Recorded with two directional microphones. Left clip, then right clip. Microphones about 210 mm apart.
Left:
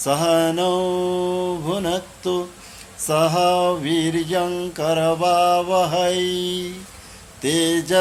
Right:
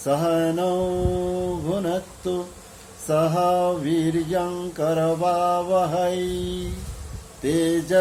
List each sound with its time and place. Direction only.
0.0 s mantra: centre (ahead or behind)
1.1 s mantra: 25° left (ahead or behind)
1.6 s mantra: centre (ahead or behind)